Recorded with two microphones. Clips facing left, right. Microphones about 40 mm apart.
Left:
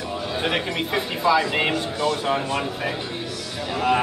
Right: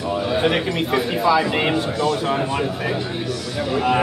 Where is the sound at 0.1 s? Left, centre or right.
Centre.